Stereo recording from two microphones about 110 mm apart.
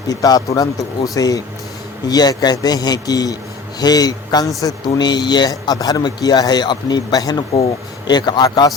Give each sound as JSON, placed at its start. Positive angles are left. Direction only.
{"t": 0.1, "sound": "a man's voice", "side_deg": 35}